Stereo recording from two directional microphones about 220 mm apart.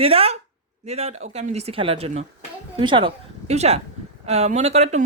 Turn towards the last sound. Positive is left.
turn(degrees=-30)  # may be behind; listen again after turning